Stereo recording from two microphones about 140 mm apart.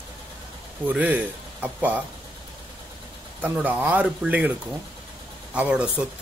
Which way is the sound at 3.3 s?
10° right (ahead or behind).